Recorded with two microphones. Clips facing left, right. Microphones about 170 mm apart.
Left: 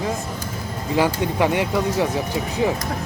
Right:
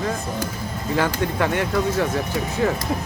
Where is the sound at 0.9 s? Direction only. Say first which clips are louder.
Left 2 dB; 15° left (ahead or behind).